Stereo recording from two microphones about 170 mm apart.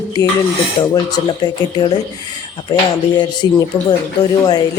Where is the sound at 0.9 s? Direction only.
25° left (ahead or behind).